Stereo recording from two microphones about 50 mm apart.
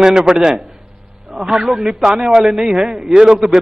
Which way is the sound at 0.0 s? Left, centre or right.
Centre.